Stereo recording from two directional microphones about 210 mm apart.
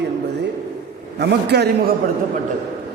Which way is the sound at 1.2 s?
50° right (ahead or behind).